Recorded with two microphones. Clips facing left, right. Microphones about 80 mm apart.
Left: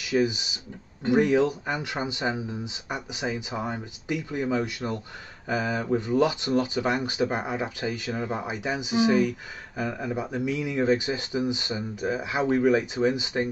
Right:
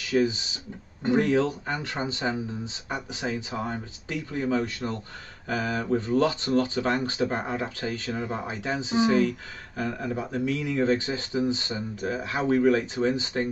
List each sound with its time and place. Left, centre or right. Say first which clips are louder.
0.0 s speech: even; centre